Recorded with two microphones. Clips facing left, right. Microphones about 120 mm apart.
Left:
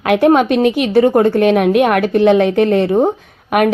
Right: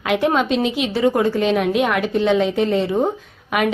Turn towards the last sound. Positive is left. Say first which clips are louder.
# left 6 dB
turn(degrees=55)  # may be behind; listen again after turning